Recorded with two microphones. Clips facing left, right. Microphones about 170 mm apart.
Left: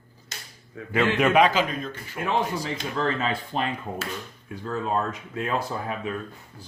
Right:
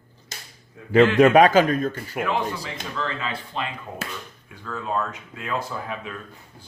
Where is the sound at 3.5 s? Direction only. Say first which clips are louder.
Left 3 dB; 45° left (ahead or behind).